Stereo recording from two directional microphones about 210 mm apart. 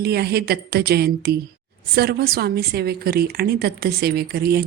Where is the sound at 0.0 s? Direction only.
50° right (ahead or behind).